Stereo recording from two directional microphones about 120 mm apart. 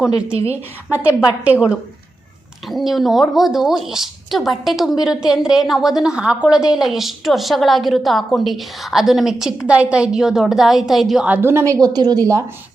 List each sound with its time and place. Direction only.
0.9 s a woman's voice: 10° right (ahead or behind)
2.6 s speech: centre (ahead or behind)
11.3 s a woman's voice: 20° right (ahead or behind)